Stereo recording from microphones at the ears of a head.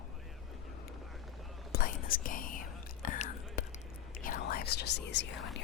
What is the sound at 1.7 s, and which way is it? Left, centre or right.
Whispering, left.